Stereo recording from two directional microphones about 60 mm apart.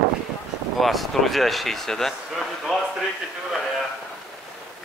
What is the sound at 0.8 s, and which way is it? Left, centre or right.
Speech, centre.